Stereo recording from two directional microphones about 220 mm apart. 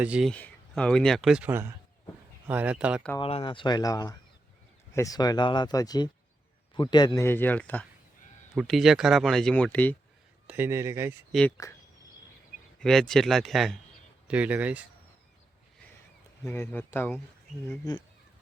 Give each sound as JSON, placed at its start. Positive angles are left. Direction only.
{"t": 0.0, "sound": "speech", "side_deg": -5}
{"t": 3.2, "sound": "speech", "side_deg": 25}
{"t": 10.4, "sound": "a man's voice", "side_deg": -10}
{"t": 11.3, "sound": "speech", "side_deg": 0}
{"t": 12.8, "sound": "a man's voice", "side_deg": 0}
{"t": 16.4, "sound": "speech", "side_deg": 10}